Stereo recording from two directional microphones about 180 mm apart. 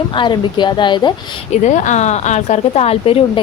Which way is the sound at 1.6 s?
40° left (ahead or behind).